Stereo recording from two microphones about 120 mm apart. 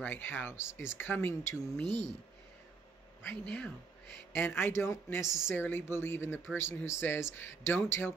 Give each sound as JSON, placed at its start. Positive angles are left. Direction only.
{"t": 0.0, "sound": "speech", "side_deg": 15}
{"t": 3.3, "sound": "speech", "side_deg": 10}